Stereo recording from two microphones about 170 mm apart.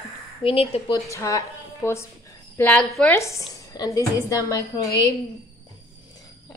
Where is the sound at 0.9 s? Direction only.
20° left (ahead or behind).